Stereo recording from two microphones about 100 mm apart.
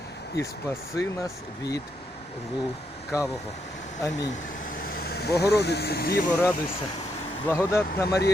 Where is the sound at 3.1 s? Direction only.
30° left (ahead or behind).